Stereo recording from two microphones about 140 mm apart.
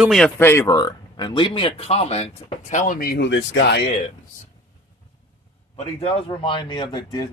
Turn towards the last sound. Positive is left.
turn(degrees=30)  # may be behind; listen again after turning